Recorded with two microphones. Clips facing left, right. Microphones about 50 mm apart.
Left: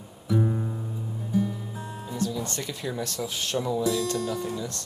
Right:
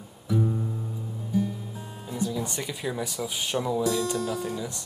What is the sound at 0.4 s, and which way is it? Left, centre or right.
Music, left.